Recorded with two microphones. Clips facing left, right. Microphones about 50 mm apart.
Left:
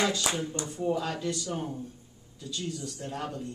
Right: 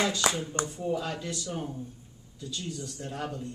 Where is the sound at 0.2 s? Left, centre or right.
Right.